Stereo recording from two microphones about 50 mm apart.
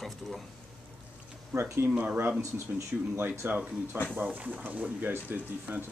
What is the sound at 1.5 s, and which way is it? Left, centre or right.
Speech, right.